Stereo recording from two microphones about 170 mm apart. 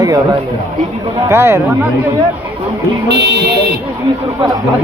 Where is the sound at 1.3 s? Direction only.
15° right (ahead or behind).